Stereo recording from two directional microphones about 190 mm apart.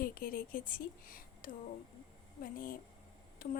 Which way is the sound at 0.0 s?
50° left (ahead or behind).